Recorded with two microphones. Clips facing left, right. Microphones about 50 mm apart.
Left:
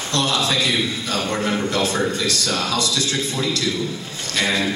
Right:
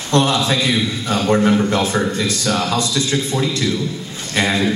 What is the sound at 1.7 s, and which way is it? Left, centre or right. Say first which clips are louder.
A man's voice: right 3 dB; right.